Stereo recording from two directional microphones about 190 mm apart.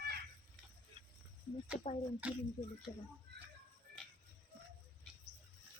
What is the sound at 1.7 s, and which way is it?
Speech, 35° left (ahead or behind).